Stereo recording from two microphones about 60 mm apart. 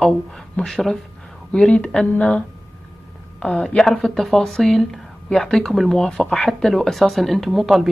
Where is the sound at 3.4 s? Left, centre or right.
Centre.